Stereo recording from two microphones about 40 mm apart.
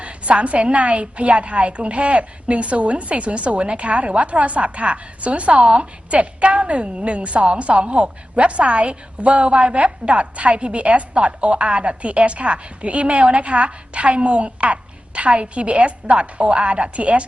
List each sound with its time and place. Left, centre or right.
0.0 s a woman's voice: right